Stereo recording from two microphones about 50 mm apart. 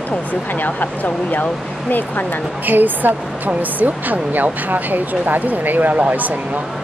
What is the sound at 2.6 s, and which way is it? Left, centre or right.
A woman's voice, right.